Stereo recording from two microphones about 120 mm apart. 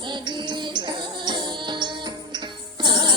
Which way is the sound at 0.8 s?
40° right (ahead or behind).